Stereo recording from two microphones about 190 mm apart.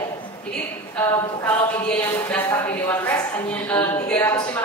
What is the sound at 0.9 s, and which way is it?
Speech, 10° left (ahead or behind).